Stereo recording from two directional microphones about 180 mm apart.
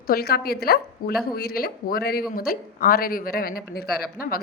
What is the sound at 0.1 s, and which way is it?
Speech, 60° left (ahead or behind).